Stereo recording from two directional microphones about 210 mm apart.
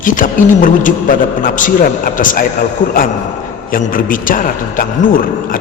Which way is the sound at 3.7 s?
40° left (ahead or behind).